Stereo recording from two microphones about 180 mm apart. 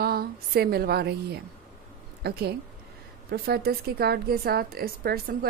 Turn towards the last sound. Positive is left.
turn(degrees=-60)  # may be behind; listen again after turning